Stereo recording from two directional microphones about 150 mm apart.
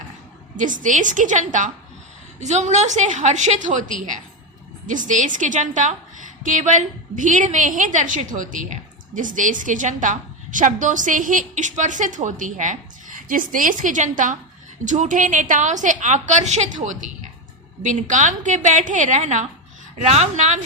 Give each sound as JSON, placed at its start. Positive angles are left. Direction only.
{"t": 0.5, "sound": "a woman's voice", "side_deg": -60}